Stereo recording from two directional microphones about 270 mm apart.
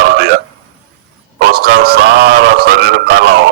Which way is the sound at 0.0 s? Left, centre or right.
Right.